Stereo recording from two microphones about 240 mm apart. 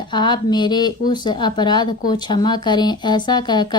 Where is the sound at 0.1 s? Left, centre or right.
Centre.